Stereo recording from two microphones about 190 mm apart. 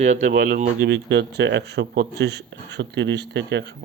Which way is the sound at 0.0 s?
40° right (ahead or behind).